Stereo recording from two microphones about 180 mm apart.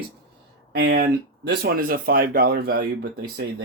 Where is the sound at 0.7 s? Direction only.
60° right (ahead or behind).